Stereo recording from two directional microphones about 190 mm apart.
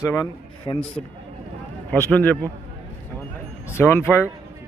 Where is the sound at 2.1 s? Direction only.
10° left (ahead or behind).